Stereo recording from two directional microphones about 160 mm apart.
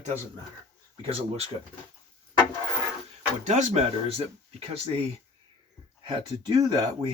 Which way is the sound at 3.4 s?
45° right (ahead or behind).